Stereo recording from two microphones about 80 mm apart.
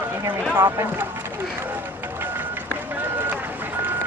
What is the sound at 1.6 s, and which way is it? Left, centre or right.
Run, right.